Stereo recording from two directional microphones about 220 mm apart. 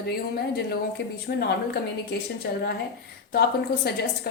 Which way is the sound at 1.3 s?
40° left (ahead or behind).